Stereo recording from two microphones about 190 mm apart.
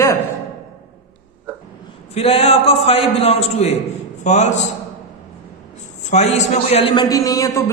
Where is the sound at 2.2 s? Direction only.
30° left (ahead or behind).